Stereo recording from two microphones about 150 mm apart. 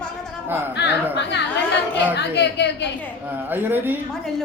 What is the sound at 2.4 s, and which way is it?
Speech, 90° left.